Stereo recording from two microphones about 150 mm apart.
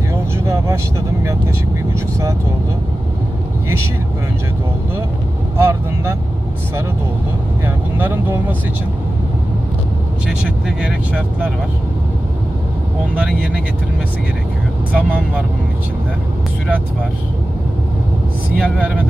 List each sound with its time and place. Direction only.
5.6 s speech: 15° right (ahead or behind)
7.6 s speech: 15° right (ahead or behind)
10.8 s speech: 5° right (ahead or behind)
13.1 s speech: 5° right (ahead or behind)
14.9 s speech: 10° right (ahead or behind)
18.6 s speech: 10° right (ahead or behind)